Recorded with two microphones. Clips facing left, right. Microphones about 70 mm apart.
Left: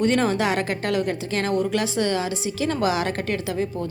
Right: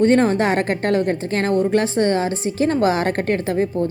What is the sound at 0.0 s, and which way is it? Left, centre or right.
Speech, right.